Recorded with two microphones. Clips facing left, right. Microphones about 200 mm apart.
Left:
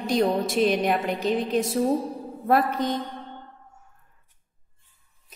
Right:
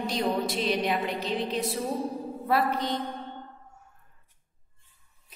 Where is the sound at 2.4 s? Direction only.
45° left (ahead or behind).